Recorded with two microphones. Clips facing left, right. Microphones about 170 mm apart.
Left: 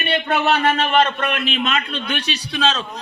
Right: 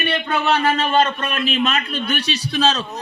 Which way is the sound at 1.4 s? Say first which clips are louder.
Right 2 dB; 40° right (ahead or behind).